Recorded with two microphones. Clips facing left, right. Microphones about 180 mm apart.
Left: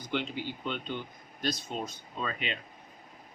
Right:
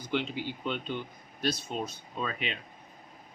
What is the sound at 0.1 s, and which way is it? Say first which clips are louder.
Speech: right 2 dB; centre (ahead or behind).